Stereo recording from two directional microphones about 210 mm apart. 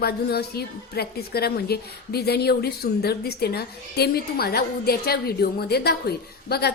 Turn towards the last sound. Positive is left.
turn(degrees=50)  # may be behind; listen again after turning